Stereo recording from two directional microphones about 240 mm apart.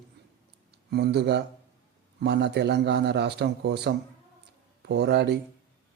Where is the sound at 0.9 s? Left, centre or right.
Right.